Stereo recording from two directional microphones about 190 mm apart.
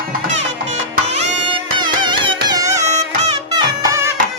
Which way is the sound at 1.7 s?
25° right (ahead or behind).